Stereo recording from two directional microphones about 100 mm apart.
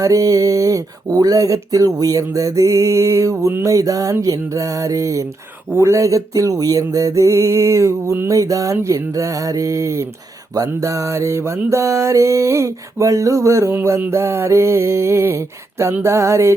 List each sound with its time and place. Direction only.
0.0 s speech: 35° right (ahead or behind)
10.5 s mantra: 35° right (ahead or behind)